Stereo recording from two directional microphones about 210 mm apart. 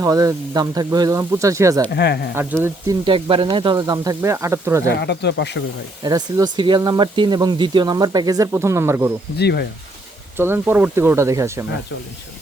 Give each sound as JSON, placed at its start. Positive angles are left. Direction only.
{"t": 0.0, "sound": "speech", "side_deg": -15}
{"t": 1.9, "sound": "speech", "side_deg": 50}
{"t": 2.3, "sound": "speech", "side_deg": -10}
{"t": 3.1, "sound": "speech", "side_deg": -25}
{"t": 4.9, "sound": "speech", "side_deg": 55}
{"t": 6.0, "sound": "speech", "side_deg": -20}
{"t": 9.4, "sound": "speech", "side_deg": 50}
{"t": 10.3, "sound": "speech", "side_deg": -10}